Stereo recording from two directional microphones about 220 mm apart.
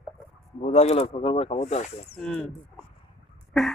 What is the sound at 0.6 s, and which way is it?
Speech, 30° left (ahead or behind).